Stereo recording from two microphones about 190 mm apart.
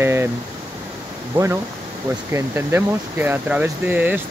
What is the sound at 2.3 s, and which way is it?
Speech, 10° right (ahead or behind).